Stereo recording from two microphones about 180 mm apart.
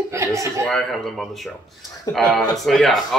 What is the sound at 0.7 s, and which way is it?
Speech, centre (ahead or behind).